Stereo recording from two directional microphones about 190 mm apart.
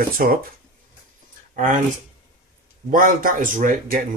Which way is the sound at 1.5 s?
45° right (ahead or behind).